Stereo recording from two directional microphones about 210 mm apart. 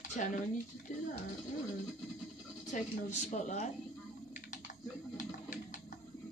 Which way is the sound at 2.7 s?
35° left (ahead or behind).